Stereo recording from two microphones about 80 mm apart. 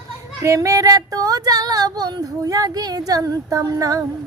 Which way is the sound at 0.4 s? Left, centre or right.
Right.